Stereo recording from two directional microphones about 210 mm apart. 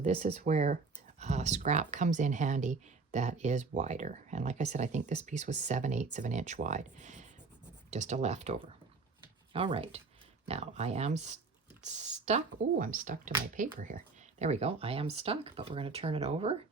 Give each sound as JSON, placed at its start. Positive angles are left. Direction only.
{"t": 0.0, "sound": "speech", "side_deg": -30}